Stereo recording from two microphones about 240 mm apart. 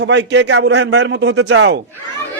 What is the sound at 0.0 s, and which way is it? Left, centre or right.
A man's voice, right.